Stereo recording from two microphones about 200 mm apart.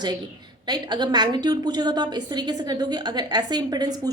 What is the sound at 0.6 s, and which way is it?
A woman's voice, 20° right (ahead or behind).